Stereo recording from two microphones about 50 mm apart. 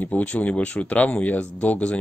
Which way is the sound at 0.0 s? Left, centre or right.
Left.